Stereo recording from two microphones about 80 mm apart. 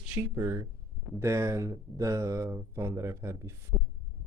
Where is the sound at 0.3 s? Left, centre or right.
Right.